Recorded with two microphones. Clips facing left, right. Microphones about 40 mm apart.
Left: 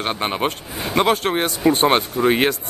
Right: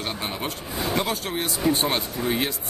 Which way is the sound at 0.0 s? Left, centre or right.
Left.